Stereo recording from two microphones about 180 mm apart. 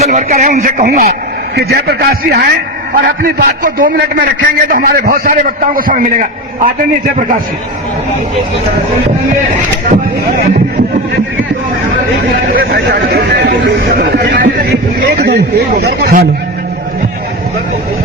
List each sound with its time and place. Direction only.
0.0 s a man's voice: 40° right (ahead or behind); by 2.5 s 60° right (ahead or behind)
2.9 s a man's voice: 50° right (ahead or behind)
12.5 s chatter: 60° right (ahead or behind)
14.4 s a sound: 55° right (ahead or behind); by 15.6 s 70° right (ahead or behind)
15.8 s a man's voice: 65° right (ahead or behind)